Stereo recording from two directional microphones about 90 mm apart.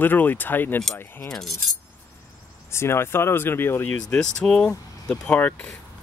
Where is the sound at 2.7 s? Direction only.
30° left (ahead or behind).